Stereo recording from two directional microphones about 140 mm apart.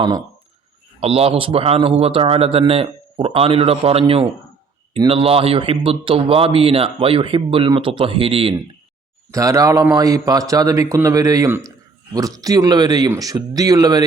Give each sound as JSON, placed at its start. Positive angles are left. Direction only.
{"t": 0.9, "sound": "a man's voice", "side_deg": -45}
{"t": 9.3, "sound": "a man's voice", "side_deg": -25}